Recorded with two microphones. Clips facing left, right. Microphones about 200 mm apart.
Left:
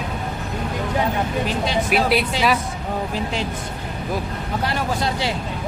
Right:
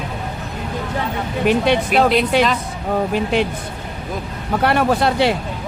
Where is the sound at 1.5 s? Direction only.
60° right (ahead or behind).